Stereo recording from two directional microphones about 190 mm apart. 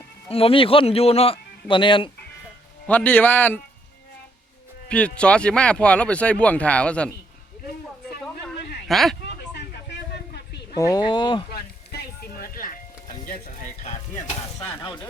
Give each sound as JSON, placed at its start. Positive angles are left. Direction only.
{"t": 0.3, "sound": "speech", "side_deg": 30}
{"t": 2.8, "sound": "speech", "side_deg": 10}
{"t": 4.9, "sound": "speech", "side_deg": 5}
{"t": 8.9, "sound": "speech", "side_deg": 0}
{"t": 9.6, "sound": "a sound", "side_deg": 60}
{"t": 10.8, "sound": "speech", "side_deg": 20}
{"t": 11.5, "sound": "music", "side_deg": 55}
{"t": 14.7, "sound": "speech", "side_deg": 25}